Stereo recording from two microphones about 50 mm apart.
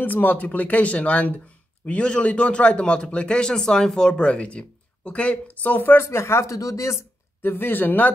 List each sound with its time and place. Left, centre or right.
0.0 s a man's voice: left
5.6 s speech: left
6.0 s speech: left
7.4 s speech: left